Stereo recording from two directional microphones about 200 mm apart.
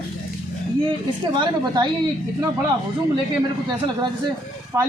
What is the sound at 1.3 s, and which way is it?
Speech, 20° right (ahead or behind).